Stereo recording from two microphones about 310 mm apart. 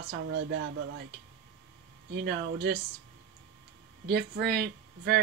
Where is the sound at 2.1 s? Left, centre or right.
Right.